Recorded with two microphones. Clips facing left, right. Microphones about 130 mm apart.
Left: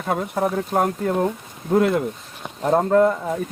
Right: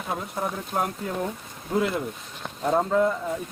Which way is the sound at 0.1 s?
65° left (ahead or behind).